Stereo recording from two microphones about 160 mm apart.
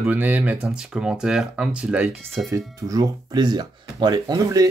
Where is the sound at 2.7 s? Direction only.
20° right (ahead or behind).